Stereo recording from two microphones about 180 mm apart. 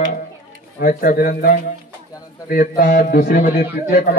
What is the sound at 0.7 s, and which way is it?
A man's voice, 55° left (ahead or behind).